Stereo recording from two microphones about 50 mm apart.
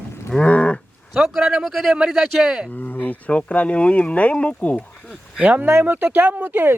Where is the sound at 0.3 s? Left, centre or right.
Left.